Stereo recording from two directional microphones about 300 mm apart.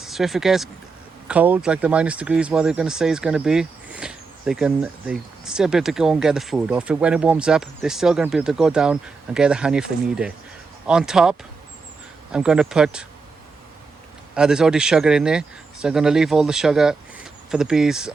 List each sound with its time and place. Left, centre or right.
0.0 s speech: centre
14.3 s speech: centre